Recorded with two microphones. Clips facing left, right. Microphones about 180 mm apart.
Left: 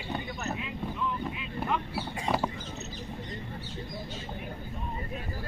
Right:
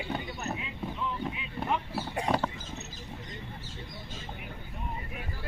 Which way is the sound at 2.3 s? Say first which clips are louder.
Even; 10° right (ahead or behind).